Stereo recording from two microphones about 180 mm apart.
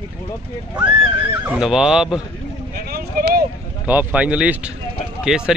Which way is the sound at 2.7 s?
55° right (ahead or behind).